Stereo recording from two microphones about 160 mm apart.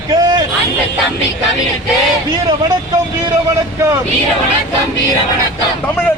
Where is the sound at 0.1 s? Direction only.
25° right (ahead or behind).